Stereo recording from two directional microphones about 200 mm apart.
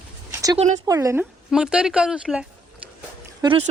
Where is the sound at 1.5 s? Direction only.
5° right (ahead or behind).